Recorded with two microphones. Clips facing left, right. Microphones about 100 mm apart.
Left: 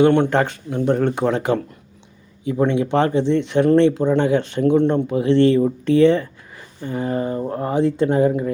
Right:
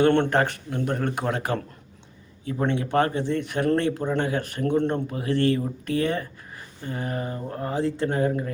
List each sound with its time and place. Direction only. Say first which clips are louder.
0.0 s speech: left 5 dB; 15° left (ahead or behind)
2.6 s speech: left 3 dB; 20° left (ahead or behind)
6.8 s speech: left 8 dB; 25° left (ahead or behind)